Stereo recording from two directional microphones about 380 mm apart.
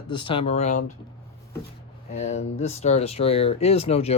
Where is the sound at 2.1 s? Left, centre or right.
Centre.